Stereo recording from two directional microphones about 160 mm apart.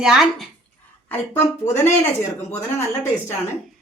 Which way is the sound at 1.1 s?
15° left (ahead or behind).